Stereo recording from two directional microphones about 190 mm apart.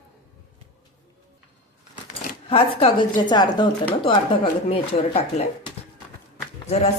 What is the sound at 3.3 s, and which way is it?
Speech, 25° left (ahead or behind).